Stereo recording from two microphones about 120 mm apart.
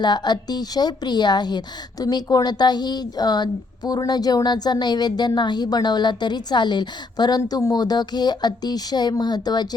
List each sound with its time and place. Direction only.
0.0 s a woman's voice: 35° left (ahead or behind)